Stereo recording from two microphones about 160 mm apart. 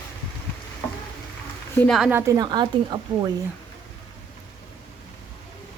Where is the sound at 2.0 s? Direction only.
15° right (ahead or behind).